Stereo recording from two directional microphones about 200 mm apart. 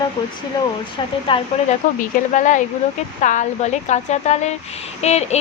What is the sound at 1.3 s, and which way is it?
Speech, 25° left (ahead or behind).